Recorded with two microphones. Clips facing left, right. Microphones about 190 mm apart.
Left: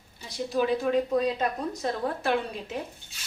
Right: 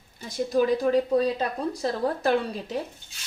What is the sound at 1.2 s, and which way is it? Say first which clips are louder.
Speech: right 2 dB; 30° right (ahead or behind).